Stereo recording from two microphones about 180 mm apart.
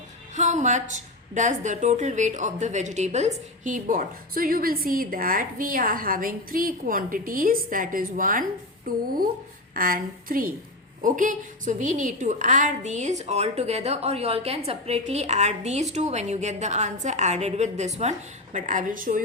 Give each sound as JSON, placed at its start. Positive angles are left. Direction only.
{"t": 0.3, "sound": "a woman's voice", "side_deg": -40}